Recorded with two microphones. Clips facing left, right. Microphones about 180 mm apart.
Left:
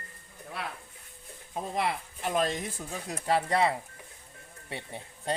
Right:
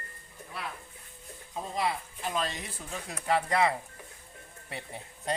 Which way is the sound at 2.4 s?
50° left (ahead or behind).